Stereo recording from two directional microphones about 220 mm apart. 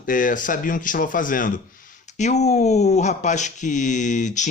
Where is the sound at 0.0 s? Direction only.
40° left (ahead or behind).